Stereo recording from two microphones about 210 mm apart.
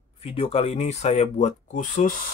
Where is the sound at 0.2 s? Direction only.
30° left (ahead or behind).